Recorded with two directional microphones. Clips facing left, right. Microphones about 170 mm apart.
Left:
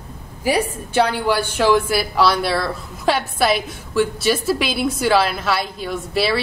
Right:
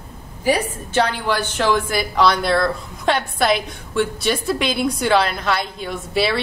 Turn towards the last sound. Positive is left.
turn(degrees=0)  # may be behind; listen again after turning